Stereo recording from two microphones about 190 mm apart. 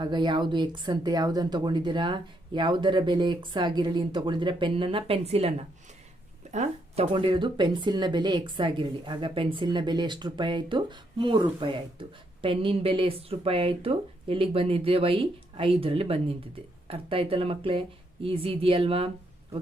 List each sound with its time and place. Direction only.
0.0 s speech: 25° right (ahead or behind)